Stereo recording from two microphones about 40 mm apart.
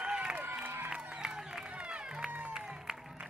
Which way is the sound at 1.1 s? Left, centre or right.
Centre.